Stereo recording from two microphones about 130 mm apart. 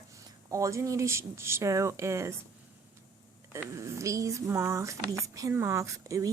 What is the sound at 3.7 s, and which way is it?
Speech, 25° right (ahead or behind).